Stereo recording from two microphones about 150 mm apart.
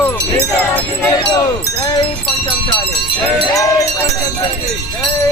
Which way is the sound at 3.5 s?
25° left (ahead or behind).